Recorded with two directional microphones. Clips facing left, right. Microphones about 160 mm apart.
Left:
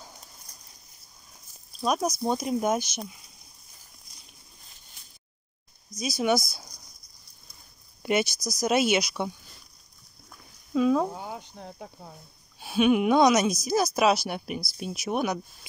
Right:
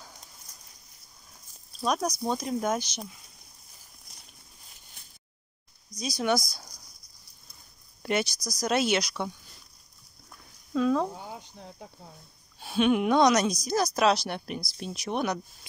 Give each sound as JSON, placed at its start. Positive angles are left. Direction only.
{"t": 1.7, "sound": "a sound", "side_deg": 0}
{"t": 2.2, "sound": "speech", "side_deg": 15}
{"t": 5.9, "sound": "speech", "side_deg": 5}
{"t": 8.0, "sound": "speech", "side_deg": 10}
{"t": 10.7, "sound": "speech", "side_deg": 10}
{"t": 11.1, "sound": "speech", "side_deg": 60}
{"t": 12.5, "sound": "speech", "side_deg": 5}